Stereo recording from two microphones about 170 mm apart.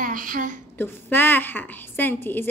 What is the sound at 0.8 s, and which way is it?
A woman's voice, 10° left (ahead or behind).